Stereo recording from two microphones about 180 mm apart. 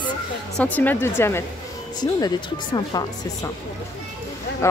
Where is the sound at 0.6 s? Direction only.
10° left (ahead or behind).